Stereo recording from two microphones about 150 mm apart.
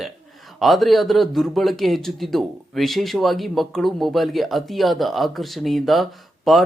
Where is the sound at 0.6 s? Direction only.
Centre (ahead or behind).